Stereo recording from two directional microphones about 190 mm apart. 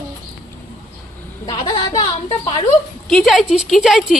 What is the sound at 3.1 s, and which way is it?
A woman's voice, centre (ahead or behind).